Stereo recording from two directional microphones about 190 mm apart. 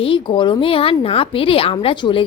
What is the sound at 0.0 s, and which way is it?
Speech, 25° left (ahead or behind).